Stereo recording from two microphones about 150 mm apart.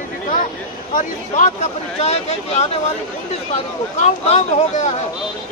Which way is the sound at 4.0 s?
50° left (ahead or behind).